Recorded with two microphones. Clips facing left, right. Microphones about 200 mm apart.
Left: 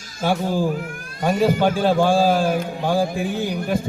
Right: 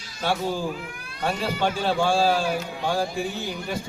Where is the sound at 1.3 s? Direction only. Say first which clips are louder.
Left 8 dB; 50° left (ahead or behind).